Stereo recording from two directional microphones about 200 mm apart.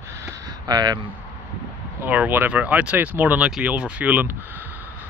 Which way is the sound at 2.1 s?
10° right (ahead or behind).